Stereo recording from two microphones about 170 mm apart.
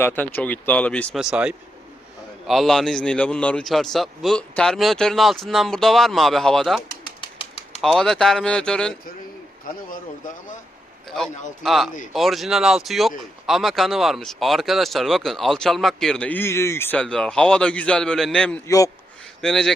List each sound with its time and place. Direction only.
0.0 s speech: 10° left (ahead or behind)
1.2 s speech: 5° right (ahead or behind)
7.2 s bird: 35° left (ahead or behind)
7.8 s speech: centre (ahead or behind)
11.1 s speech: 5° left (ahead or behind)